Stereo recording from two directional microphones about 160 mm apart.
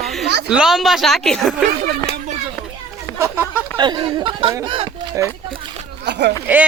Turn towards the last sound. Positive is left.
turn(degrees=-10)  # may be behind; listen again after turning